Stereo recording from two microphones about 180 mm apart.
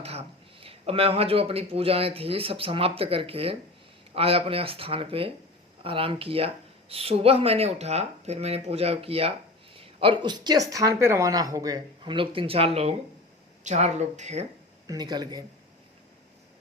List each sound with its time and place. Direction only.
0.0 s a woman's voice: 35° right (ahead or behind)
14.8 s a woman's voice: 20° right (ahead or behind)